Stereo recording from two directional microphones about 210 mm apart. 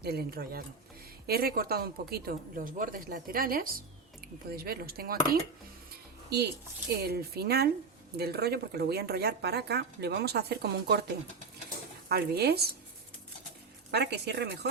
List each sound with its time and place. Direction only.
0.0 s speech: 50° right (ahead or behind)
6.9 s speech: 45° right (ahead or behind)
12.0 s speech: 50° right (ahead or behind)
13.9 s speech: 50° right (ahead or behind)